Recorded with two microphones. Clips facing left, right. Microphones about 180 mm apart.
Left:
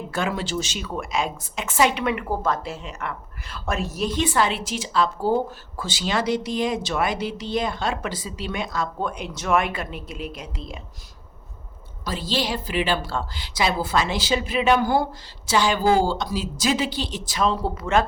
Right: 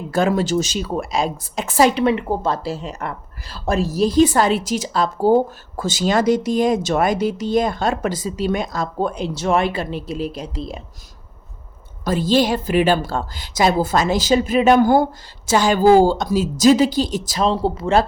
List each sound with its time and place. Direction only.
0.1 s a woman's voice: 40° right (ahead or behind)
12.0 s a woman's voice: 50° right (ahead or behind); by 18.0 s 30° right (ahead or behind)